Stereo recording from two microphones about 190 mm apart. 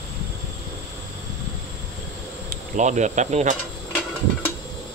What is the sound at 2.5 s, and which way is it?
Speech, 40° right (ahead or behind).